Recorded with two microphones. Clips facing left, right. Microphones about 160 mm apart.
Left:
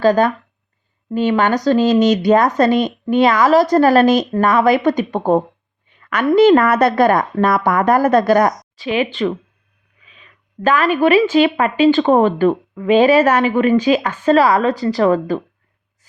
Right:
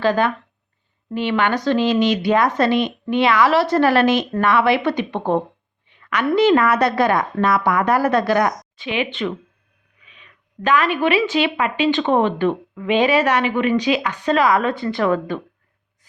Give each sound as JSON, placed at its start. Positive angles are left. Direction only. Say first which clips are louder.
{"t": 0.0, "sound": "speech", "louder": "left 5 dB", "side_deg": 40}
{"t": 10.1, "sound": "speech", "louder": "left 1 dB", "side_deg": 35}